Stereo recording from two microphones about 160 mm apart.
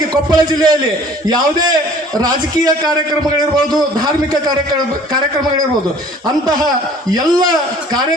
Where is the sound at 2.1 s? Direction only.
25° right (ahead or behind).